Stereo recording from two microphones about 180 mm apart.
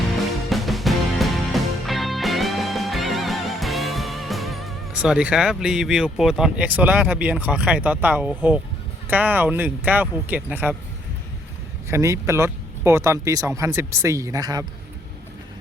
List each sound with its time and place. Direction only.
0.5 s music: centre (ahead or behind)
9.0 s speech: 10° right (ahead or behind)
11.9 s speech: 15° right (ahead or behind)